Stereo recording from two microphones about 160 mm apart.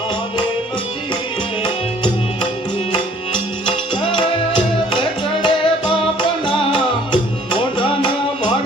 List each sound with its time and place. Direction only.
3.7 s music: 30° left (ahead or behind)